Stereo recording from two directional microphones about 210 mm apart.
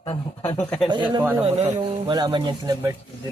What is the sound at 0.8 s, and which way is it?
Speech, 20° right (ahead or behind).